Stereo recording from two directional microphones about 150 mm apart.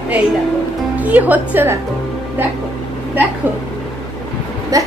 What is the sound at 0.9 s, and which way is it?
Speech, 10° right (ahead or behind).